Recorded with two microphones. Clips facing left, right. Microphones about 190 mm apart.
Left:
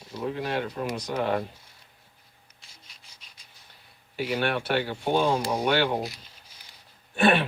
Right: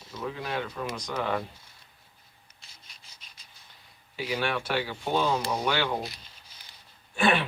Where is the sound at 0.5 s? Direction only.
30° left (ahead or behind).